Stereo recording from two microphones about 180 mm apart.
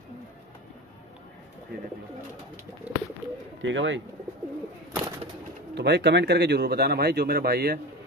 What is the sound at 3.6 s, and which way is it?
Speech, 90° right.